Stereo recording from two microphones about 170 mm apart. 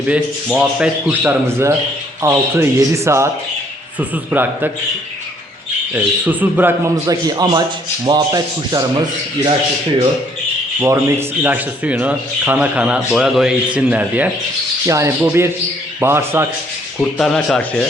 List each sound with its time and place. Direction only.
0.1 s speech: 10° right (ahead or behind)
5.9 s speech: 10° right (ahead or behind)
10.8 s speech: 15° right (ahead or behind)
17.0 s speech: centre (ahead or behind)